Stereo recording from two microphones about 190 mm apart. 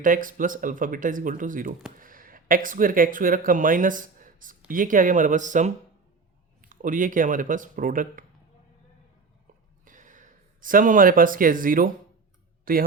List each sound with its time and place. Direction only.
0.0 s speech: 45° right (ahead or behind)
9.8 s a sound: 45° right (ahead or behind)
12.7 s speech: 50° right (ahead or behind)